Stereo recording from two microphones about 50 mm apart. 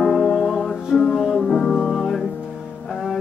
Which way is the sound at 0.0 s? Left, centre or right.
Centre.